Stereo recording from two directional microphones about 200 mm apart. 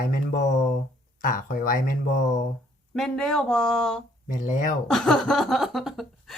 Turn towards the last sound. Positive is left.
turn(degrees=0)  # may be behind; listen again after turning